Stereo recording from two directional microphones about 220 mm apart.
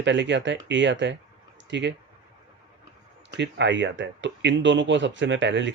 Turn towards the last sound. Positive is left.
turn(degrees=-55)  # may be behind; listen again after turning